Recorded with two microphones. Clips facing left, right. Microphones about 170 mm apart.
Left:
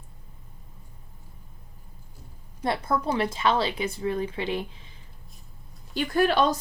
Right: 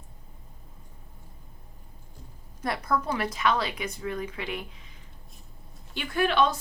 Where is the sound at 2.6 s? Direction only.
25° left (ahead or behind).